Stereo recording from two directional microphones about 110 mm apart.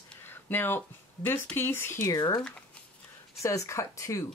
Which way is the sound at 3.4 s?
30° left (ahead or behind).